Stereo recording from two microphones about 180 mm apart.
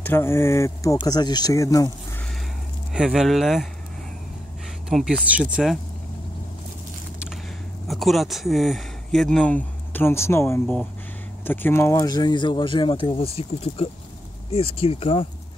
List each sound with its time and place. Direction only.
0.0 s speech: 15° left (ahead or behind)
2.9 s speech: 5° right (ahead or behind)
4.8 s speech: centre (ahead or behind)
7.9 s speech: centre (ahead or behind); by 15.2 s 30° left (ahead or behind)